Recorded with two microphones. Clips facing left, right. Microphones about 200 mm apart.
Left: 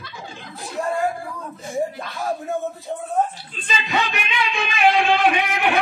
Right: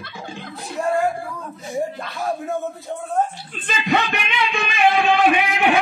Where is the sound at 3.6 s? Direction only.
55° right (ahead or behind).